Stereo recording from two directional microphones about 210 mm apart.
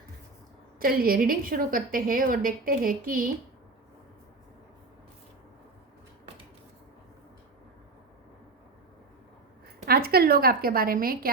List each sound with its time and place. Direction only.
0.8 s a woman's voice: 45° right (ahead or behind)
9.8 s a woman's voice: 50° right (ahead or behind)